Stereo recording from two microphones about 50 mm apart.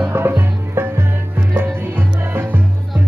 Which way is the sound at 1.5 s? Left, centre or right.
Right.